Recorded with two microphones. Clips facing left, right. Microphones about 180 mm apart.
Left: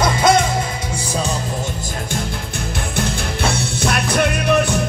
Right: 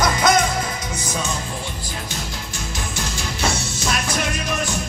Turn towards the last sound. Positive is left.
turn(degrees=60)  # may be behind; listen again after turning